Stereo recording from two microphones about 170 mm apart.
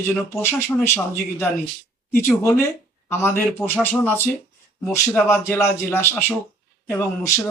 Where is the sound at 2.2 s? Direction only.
15° left (ahead or behind).